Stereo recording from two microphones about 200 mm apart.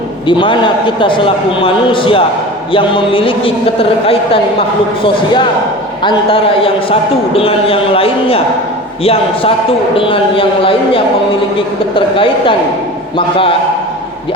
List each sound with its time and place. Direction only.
0.3 s a man's voice: 25° left (ahead or behind)